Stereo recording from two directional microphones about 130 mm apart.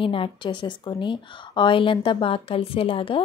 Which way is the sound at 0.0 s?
40° left (ahead or behind).